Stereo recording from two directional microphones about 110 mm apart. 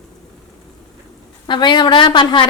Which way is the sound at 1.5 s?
45° left (ahead or behind).